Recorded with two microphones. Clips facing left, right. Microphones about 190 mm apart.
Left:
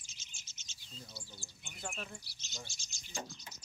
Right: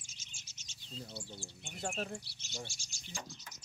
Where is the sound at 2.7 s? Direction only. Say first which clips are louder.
Right 6 dB; 20° left (ahead or behind).